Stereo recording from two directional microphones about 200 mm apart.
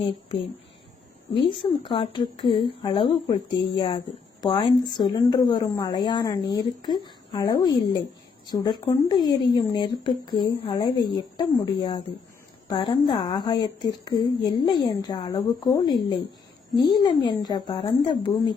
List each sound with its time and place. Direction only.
0.0 s a woman's voice: 30° left (ahead or behind)